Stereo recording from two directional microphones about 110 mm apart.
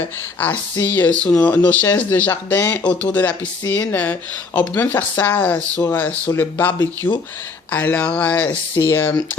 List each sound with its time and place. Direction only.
0.3 s speech: 15° left (ahead or behind)
2.8 s speech: 10° left (ahead or behind)